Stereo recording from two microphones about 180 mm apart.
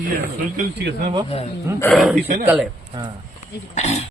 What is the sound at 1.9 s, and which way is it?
Speech, centre (ahead or behind).